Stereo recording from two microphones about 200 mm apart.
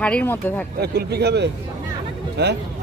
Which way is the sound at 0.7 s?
55° right (ahead or behind).